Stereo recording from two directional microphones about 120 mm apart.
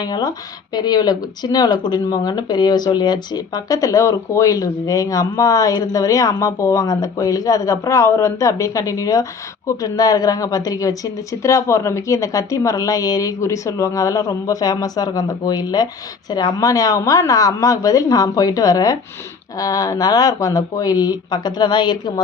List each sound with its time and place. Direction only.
0.0 s speech: 35° left (ahead or behind)